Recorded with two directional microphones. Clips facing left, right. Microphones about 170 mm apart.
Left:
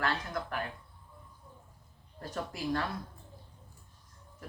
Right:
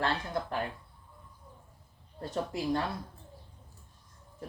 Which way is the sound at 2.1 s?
25° right (ahead or behind).